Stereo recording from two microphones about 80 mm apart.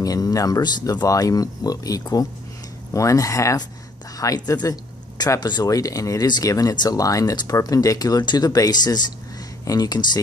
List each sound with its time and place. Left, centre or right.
0.0 s speech: left
1.0 s speech: left
6.7 s speech: left
7.0 s speech: left